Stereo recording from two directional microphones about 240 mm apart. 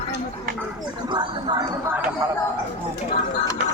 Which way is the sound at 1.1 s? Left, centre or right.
Centre.